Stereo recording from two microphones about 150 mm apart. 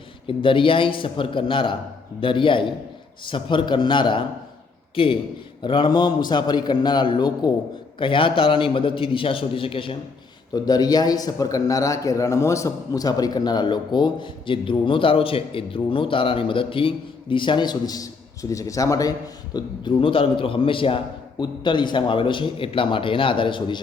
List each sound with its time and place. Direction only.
0.3 s a man's voice: 35° left (ahead or behind)
10.5 s a man's voice: 25° left (ahead or behind)
19.5 s a man's voice: 35° left (ahead or behind)